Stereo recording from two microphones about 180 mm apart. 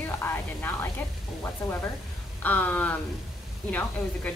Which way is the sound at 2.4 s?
10° left (ahead or behind).